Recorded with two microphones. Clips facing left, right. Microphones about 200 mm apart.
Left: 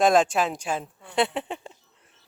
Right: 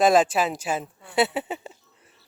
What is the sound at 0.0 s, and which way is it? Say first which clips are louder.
Speech: right 1 dB; 5° right (ahead or behind).